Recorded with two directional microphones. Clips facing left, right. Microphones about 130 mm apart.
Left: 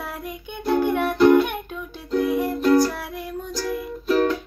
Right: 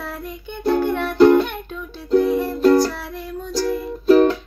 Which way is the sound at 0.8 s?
15° left (ahead or behind).